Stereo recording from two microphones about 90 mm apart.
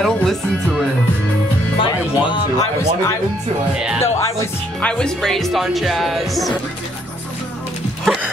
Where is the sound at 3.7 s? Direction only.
10° right (ahead or behind).